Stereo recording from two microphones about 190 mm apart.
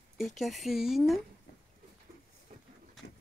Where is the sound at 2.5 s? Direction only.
50° right (ahead or behind).